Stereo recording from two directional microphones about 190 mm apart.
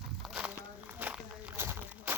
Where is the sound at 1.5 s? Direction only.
10° right (ahead or behind).